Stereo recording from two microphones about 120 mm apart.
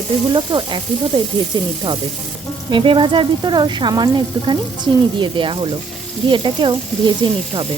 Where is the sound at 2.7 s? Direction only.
45° right (ahead or behind).